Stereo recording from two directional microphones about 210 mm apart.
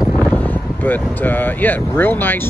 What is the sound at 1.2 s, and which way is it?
Speech, 10° left (ahead or behind).